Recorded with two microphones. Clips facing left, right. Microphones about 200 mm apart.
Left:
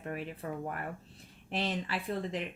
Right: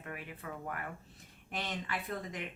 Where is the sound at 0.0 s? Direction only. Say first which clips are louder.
Left 7 dB; 30° left (ahead or behind).